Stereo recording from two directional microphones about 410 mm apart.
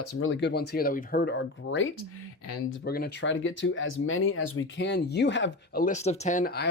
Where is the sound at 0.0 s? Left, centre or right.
Left.